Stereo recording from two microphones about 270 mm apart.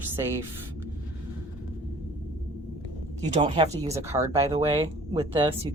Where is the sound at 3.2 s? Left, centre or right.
Right.